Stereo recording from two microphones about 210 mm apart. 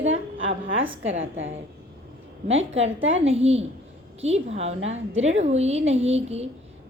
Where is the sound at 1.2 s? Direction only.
65° right (ahead or behind).